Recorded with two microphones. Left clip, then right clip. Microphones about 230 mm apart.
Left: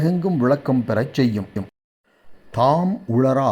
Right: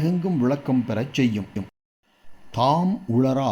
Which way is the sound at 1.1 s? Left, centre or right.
Left.